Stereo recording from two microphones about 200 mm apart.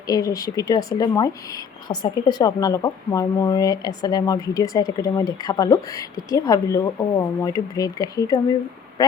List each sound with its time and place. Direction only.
0.1 s speech: 15° left (ahead or behind)